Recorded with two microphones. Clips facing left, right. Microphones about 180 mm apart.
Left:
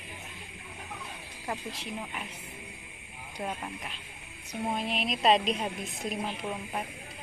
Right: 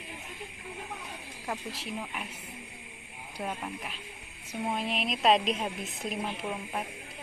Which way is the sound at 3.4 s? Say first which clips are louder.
Even; centre (ahead or behind).